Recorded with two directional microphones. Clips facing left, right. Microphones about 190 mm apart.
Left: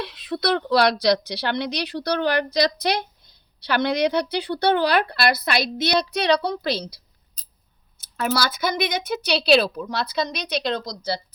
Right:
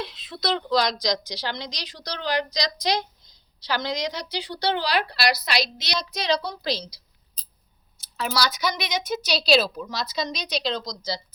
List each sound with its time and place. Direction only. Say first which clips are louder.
0.0 s a woman's voice: left 4 dB; 60° left (ahead or behind)